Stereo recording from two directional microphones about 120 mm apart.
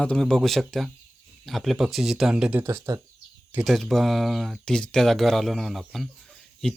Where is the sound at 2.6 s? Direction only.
20° right (ahead or behind).